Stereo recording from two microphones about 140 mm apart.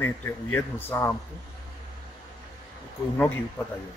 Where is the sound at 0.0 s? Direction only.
15° left (ahead or behind).